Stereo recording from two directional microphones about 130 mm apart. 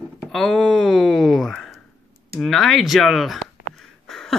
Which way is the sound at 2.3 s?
Centre (ahead or behind).